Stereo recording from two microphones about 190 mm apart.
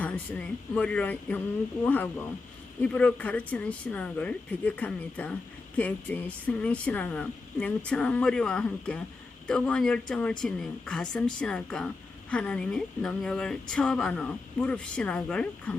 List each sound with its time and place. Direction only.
0.0 s a woman's voice: 5° left (ahead or behind)